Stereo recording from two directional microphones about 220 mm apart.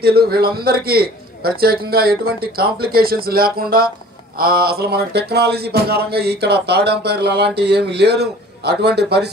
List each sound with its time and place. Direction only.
0.0 s speech: 45° right (ahead or behind)